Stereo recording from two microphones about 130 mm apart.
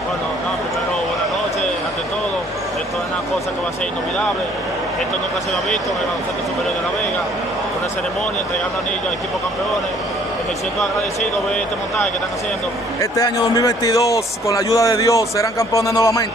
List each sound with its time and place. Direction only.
13.0 s speech: 25° left (ahead or behind)